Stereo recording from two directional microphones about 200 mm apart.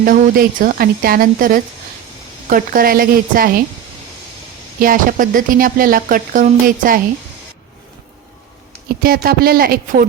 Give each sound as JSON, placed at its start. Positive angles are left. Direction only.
{"t": 0.0, "sound": "speech", "side_deg": -45}
{"t": 4.8, "sound": "speech", "side_deg": -45}
{"t": 9.0, "sound": "speech", "side_deg": -50}